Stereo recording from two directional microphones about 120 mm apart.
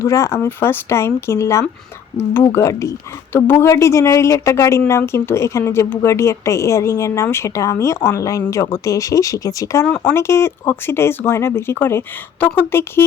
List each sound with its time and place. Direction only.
0.0 s a woman's voice: 25° left (ahead or behind)
9.8 s speech: 10° left (ahead or behind)
10.2 s a woman's voice: 20° left (ahead or behind)